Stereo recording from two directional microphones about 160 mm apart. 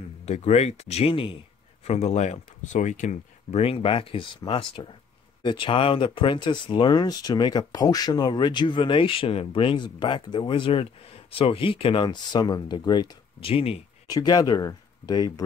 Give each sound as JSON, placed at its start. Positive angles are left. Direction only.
{"t": 0.2, "sound": "speech", "side_deg": 40}
{"t": 1.9, "sound": "speech", "side_deg": 45}
{"t": 14.0, "sound": "speech", "side_deg": 25}